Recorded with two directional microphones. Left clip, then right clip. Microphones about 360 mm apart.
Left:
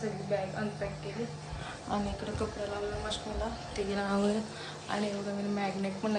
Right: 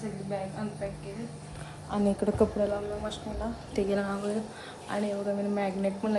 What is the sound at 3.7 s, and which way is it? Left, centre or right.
Speech, centre.